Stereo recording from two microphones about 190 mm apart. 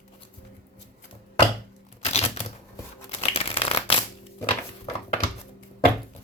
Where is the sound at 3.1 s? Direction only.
30° left (ahead or behind).